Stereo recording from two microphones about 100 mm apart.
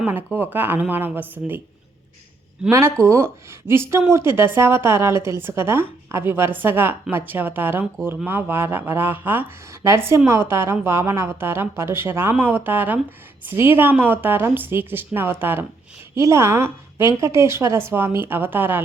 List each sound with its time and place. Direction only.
0.0 s speech: 20° right (ahead or behind)
2.6 s speech: 30° right (ahead or behind)